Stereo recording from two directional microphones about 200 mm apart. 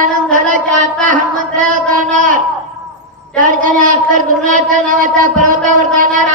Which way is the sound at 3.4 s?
40° right (ahead or behind).